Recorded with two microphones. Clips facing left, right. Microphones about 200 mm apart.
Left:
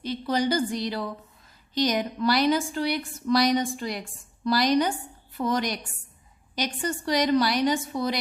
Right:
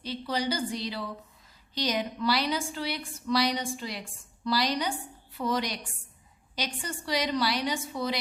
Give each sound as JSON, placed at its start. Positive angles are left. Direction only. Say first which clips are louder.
{"t": 0.0, "sound": "a woman's voice", "louder": "left 5 dB", "side_deg": 50}